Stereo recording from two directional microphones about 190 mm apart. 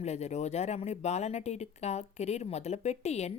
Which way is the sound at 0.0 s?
35° left (ahead or behind).